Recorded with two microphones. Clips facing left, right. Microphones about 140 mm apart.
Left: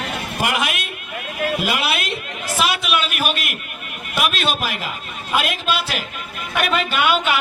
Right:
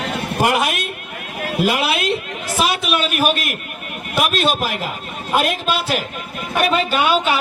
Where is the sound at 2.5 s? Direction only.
40° right (ahead or behind).